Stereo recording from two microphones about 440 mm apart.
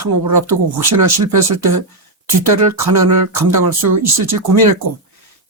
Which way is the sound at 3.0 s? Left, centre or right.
Right.